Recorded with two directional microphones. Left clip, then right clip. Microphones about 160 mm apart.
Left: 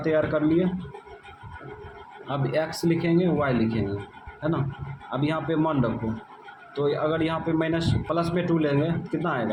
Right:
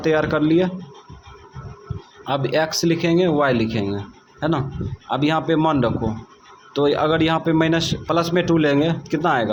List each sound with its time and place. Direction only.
0.0 s a man's voice: 45° right (ahead or behind)
2.2 s a man's voice: 45° right (ahead or behind)